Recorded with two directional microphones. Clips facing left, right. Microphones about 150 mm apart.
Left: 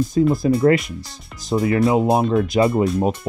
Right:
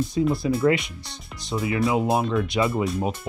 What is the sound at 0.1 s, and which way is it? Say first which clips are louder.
Speech: left 7 dB; 45° left (ahead or behind).